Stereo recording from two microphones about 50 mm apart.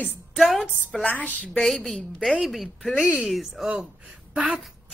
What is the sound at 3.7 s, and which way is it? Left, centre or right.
Speech, centre.